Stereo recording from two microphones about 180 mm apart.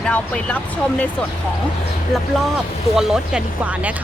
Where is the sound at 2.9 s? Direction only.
5° right (ahead or behind).